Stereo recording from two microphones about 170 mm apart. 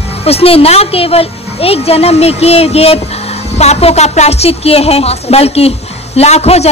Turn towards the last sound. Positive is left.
turn(degrees=40)  # may be behind; listen again after turning